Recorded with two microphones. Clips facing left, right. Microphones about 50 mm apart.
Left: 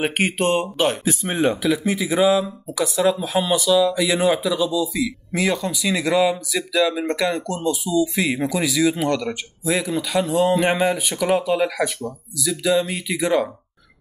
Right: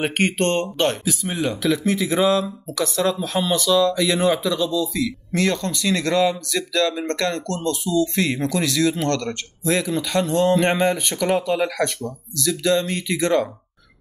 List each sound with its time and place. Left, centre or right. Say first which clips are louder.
0.0 s speech: even; centre
1.0 s speech: left 4 dB; left
1.6 s speech: even; centre